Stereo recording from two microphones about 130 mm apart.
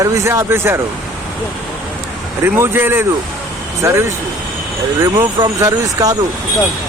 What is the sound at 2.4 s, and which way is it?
A man's voice, 15° right (ahead or behind).